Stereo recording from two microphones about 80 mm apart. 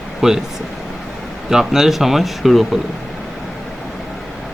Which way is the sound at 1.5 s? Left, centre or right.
Centre.